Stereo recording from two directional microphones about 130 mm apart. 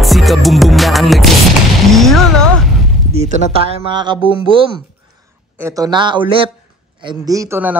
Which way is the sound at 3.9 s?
40° right (ahead or behind).